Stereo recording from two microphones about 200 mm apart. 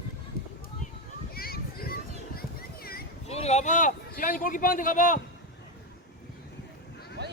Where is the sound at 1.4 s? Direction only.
50° left (ahead or behind).